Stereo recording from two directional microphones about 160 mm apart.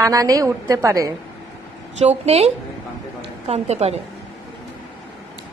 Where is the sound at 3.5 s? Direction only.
40° right (ahead or behind).